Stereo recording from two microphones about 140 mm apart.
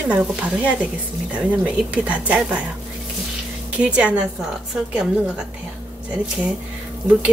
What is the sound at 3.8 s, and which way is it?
Speech, 10° right (ahead or behind).